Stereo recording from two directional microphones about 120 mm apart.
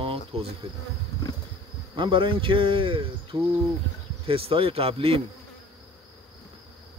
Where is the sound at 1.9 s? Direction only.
45° right (ahead or behind).